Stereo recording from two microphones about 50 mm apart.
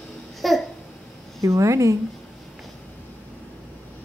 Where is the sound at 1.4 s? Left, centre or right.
Right.